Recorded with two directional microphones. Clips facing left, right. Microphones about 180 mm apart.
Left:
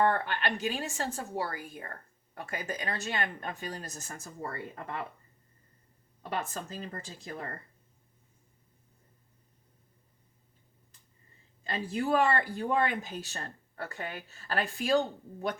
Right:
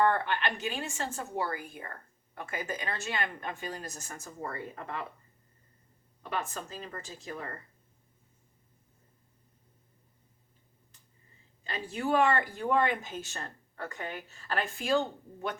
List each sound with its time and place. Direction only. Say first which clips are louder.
0.0 s a woman's voice: even; 40° left (ahead or behind)
6.3 s a woman's voice: left 1 dB; 40° left (ahead or behind)
11.7 s a woman's voice: left 1 dB; 35° left (ahead or behind)